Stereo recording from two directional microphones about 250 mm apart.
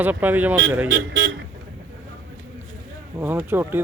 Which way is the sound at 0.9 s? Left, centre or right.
Right.